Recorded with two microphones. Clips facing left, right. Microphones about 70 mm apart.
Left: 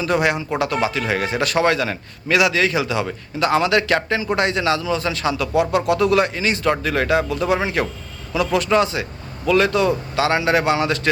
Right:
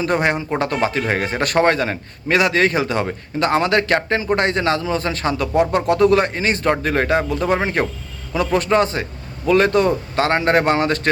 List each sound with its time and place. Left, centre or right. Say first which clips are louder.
0.0 s a man's voice: even; right